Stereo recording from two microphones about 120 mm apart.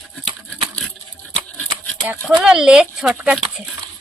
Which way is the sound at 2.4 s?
5° right (ahead or behind).